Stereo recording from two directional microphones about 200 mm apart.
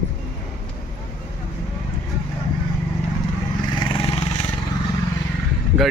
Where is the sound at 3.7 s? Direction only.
25° left (ahead or behind).